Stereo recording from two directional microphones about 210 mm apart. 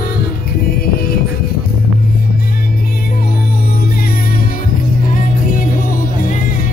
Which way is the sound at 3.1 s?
45° left (ahead or behind).